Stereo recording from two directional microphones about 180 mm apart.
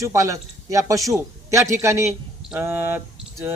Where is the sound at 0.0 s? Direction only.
15° right (ahead or behind).